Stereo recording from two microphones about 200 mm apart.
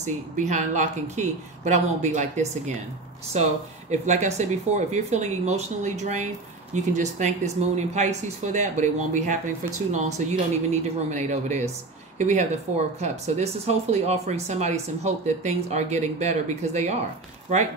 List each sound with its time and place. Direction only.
0.0 s speech: 35° right (ahead or behind)